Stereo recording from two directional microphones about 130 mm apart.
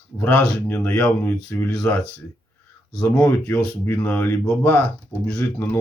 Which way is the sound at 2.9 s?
10° left (ahead or behind).